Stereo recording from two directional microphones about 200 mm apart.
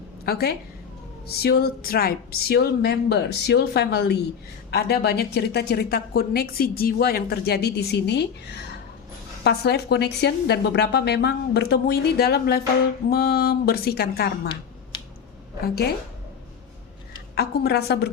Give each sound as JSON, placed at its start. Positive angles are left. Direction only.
{"t": 0.3, "sound": "a woman's voice", "side_deg": 50}
{"t": 9.4, "sound": "a woman's voice", "side_deg": 55}
{"t": 15.6, "sound": "a woman's voice", "side_deg": 50}
{"t": 17.3, "sound": "a woman's voice", "side_deg": 50}